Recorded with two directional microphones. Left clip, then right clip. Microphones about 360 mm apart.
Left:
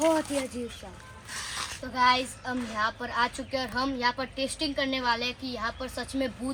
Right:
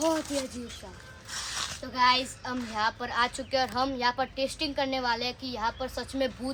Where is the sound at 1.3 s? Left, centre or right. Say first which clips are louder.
Right 1 dB; centre.